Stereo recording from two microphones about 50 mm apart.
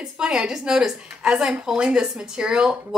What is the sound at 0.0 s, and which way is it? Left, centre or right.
A woman's voice, centre.